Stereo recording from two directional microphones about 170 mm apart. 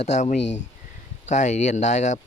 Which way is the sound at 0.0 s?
45° left (ahead or behind).